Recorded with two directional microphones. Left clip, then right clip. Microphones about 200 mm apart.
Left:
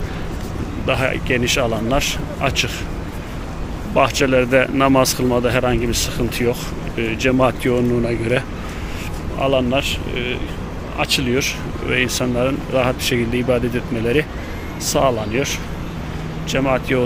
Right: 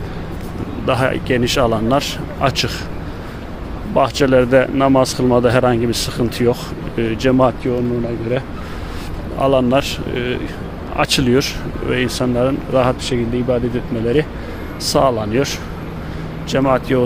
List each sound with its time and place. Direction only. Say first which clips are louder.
0.8 s speech: right 2 dB; 25° right (ahead or behind)
3.9 s speech: right 2 dB; 15° right (ahead or behind)
7.6 s speech: left 1 dB; centre (ahead or behind)
9.4 s speech: right 3 dB; 30° right (ahead or behind)
13.1 s speech: even; 10° right (ahead or behind)
14.9 s speech: right 3 dB; 25° right (ahead or behind)